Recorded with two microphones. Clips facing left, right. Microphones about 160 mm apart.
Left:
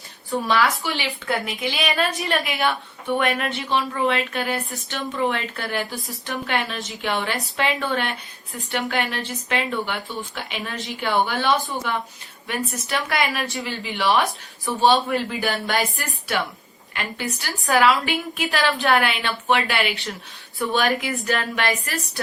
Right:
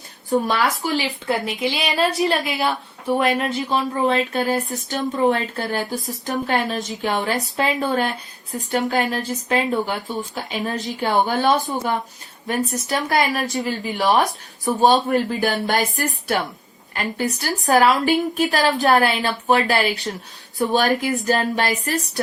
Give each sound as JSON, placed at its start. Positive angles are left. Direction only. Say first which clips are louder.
{"t": 0.3, "sound": "a woman's voice", "louder": "right 2 dB", "side_deg": -40}